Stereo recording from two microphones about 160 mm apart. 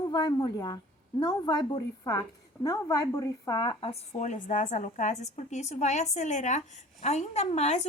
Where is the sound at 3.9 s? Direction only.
45° left (ahead or behind).